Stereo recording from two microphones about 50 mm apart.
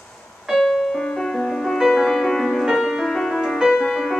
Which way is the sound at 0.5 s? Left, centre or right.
Centre.